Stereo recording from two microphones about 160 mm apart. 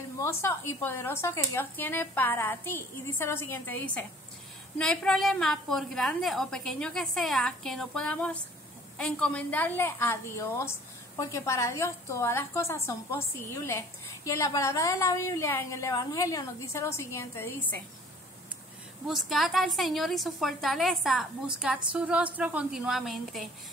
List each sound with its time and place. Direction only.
0.2 s a woman's voice: 15° left (ahead or behind)
19.0 s a woman's voice: centre (ahead or behind)